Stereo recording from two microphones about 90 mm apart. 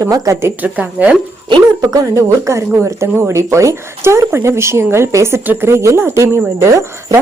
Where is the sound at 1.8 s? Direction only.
40° right (ahead or behind).